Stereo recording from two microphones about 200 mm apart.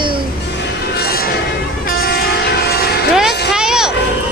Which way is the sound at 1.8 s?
45° left (ahead or behind).